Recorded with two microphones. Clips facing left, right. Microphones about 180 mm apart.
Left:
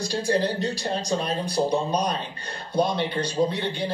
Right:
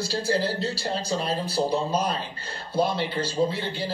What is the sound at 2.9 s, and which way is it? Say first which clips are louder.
Speech: left 1 dB; 5° right (ahead or behind).